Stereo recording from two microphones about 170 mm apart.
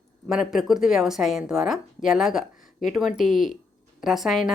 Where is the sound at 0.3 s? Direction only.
5° right (ahead or behind).